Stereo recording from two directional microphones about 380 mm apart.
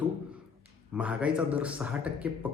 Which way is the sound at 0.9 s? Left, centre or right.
Centre.